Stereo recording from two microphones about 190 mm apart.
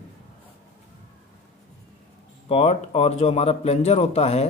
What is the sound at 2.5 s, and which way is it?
Speech, 30° left (ahead or behind).